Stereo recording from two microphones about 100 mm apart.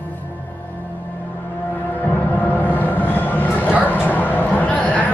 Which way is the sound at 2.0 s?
15° left (ahead or behind).